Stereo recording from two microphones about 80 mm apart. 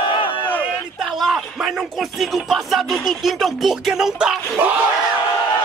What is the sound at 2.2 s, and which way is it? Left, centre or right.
Music, centre.